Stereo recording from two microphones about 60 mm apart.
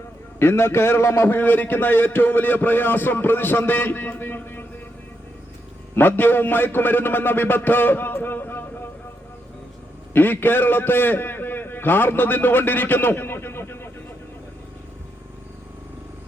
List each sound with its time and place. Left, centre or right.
0.3 s a man's voice: left
5.9 s a man's voice: left
10.2 s a man's voice: left